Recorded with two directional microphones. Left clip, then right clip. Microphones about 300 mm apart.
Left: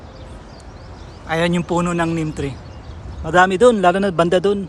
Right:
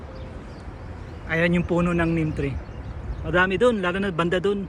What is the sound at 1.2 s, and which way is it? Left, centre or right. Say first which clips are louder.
A man's voice: left 4 dB; centre.